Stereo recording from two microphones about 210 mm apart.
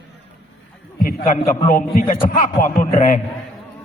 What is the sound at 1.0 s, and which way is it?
A man's voice, 40° left (ahead or behind).